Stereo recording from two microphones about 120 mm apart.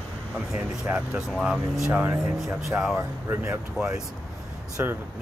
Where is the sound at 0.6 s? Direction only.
15° right (ahead or behind).